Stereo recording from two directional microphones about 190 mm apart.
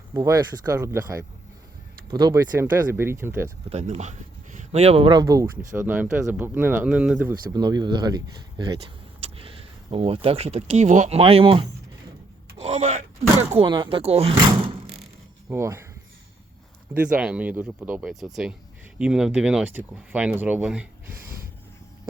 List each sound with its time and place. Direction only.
0.1 s speech: 20° right (ahead or behind)
3.7 s speech: 35° right (ahead or behind); by 7.3 s 5° right (ahead or behind)
7.5 s speech: 20° right (ahead or behind)
12.5 s a sound: 35° right (ahead or behind)
13.5 s speech: 25° right (ahead or behind)
15.4 s speech: 15° right (ahead or behind)
16.9 s speech: 5° right (ahead or behind)